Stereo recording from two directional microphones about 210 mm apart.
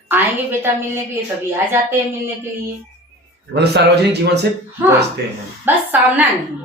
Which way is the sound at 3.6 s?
50° right (ahead or behind).